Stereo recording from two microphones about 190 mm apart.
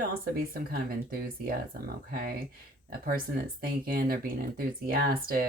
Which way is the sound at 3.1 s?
50° right (ahead or behind).